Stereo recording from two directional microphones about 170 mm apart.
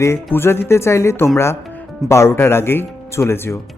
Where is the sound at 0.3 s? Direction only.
15° left (ahead or behind).